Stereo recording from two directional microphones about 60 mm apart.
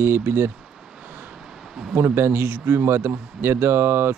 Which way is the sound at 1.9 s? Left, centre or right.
Right.